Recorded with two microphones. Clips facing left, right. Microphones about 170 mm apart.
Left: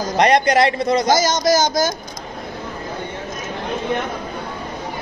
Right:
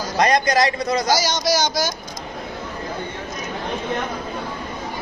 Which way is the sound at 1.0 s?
50° left (ahead or behind).